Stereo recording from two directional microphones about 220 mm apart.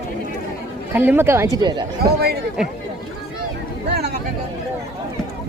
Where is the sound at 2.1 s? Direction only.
45° right (ahead or behind).